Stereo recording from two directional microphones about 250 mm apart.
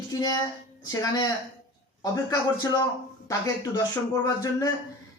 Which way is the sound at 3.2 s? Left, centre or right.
Centre.